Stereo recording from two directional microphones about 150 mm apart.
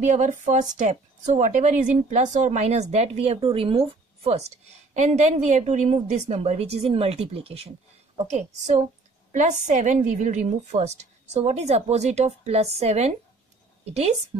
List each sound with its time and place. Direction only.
0.0 s a woman's voice: 55° right (ahead or behind)
8.3 s a woman's voice: 50° right (ahead or behind)